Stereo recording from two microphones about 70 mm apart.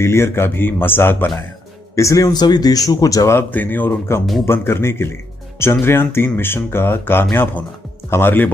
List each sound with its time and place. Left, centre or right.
0.0 s speech: left
2.0 s a man's voice: left
2.3 s a man's voice: left
3.4 s speech: left